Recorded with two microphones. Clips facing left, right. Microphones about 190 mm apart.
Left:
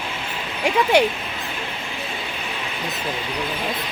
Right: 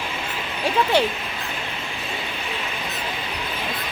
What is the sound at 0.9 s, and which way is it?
Speech, 10° left (ahead or behind).